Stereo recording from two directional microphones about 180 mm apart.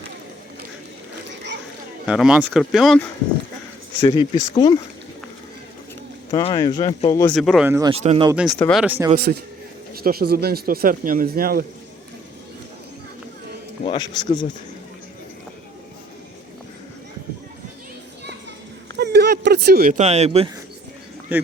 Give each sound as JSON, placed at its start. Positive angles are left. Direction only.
{"t": 2.0, "sound": "speech", "side_deg": -5}
{"t": 4.0, "sound": "speech", "side_deg": 30}
{"t": 6.3, "sound": "speech", "side_deg": 25}
{"t": 7.3, "sound": "speech", "side_deg": 0}
{"t": 7.7, "sound": "speech", "side_deg": -20}
{"t": 7.9, "sound": "speech", "side_deg": -35}
{"t": 8.5, "sound": "speech", "side_deg": 10}
{"t": 8.8, "sound": "speech", "side_deg": -10}
{"t": 9.1, "sound": "speech", "side_deg": -60}
{"t": 13.8, "sound": "speech", "side_deg": 25}
{"t": 18.9, "sound": "a sound", "side_deg": -70}
{"t": 20.0, "sound": "speech", "side_deg": -40}
{"t": 21.3, "sound": "a man's voice", "side_deg": -10}